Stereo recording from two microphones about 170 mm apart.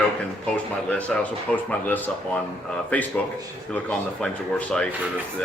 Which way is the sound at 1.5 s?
10° left (ahead or behind).